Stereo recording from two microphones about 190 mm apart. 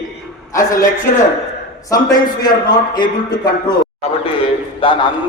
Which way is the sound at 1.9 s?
20° left (ahead or behind).